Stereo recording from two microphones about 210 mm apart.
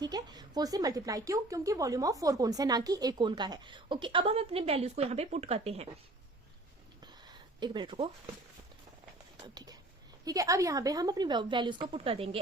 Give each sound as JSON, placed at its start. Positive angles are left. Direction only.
{"t": 0.0, "sound": "speech", "side_deg": -20}
{"t": 7.0, "sound": "a sound", "side_deg": -20}
{"t": 10.2, "sound": "speech", "side_deg": -15}